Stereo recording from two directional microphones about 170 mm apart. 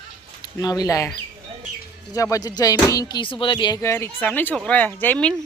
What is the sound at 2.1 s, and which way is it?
A woman's voice, 20° left (ahead or behind).